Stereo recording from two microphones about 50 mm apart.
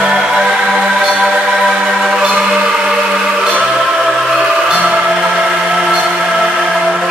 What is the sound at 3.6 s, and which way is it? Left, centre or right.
Music, centre.